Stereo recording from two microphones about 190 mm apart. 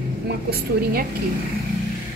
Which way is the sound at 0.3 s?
55° right (ahead or behind).